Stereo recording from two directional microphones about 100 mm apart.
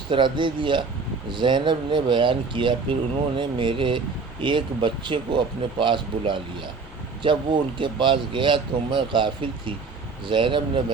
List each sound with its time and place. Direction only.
0.1 s speech: 55° right (ahead or behind)